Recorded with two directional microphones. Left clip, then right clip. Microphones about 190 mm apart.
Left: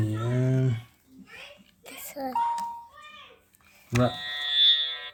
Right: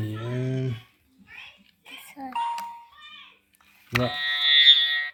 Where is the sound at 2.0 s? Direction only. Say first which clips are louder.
Left 5 dB; 60° left (ahead or behind).